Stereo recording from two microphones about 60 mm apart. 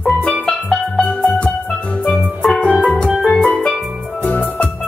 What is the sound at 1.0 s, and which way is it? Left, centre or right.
Music, left.